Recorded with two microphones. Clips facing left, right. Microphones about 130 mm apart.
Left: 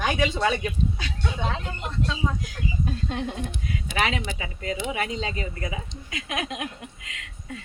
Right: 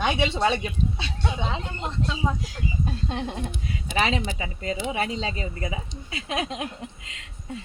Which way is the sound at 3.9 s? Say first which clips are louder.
Right 2 dB; 30° right (ahead or behind).